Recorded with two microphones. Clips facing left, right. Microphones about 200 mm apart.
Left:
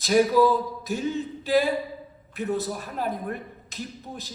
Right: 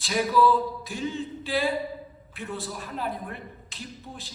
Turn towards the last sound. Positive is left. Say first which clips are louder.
# left 5 dB
turn(degrees=40)  # may be behind; listen again after turning